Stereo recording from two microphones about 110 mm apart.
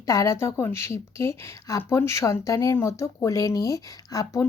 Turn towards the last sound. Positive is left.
turn(degrees=30)  # may be behind; listen again after turning